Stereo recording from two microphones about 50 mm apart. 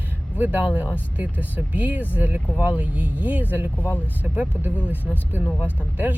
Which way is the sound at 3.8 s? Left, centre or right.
Left.